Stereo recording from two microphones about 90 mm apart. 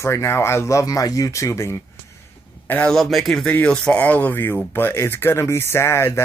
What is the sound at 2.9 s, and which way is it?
Speech, centre (ahead or behind).